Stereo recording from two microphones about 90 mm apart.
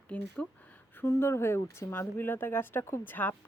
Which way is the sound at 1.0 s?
30° left (ahead or behind).